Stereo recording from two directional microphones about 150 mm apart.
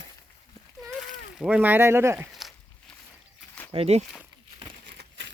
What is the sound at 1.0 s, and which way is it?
Speech, centre (ahead or behind).